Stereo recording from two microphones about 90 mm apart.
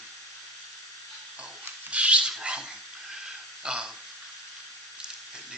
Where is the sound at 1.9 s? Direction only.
15° right (ahead or behind).